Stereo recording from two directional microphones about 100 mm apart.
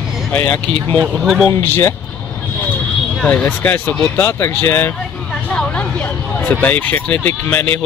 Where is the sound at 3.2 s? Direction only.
15° left (ahead or behind).